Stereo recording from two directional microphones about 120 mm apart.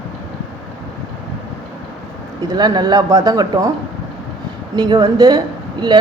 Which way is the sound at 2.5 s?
35° right (ahead or behind).